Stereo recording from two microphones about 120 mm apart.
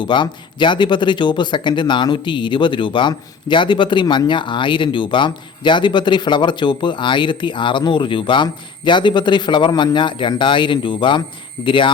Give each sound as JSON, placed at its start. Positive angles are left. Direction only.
{"t": 0.0, "sound": "speech", "side_deg": 40}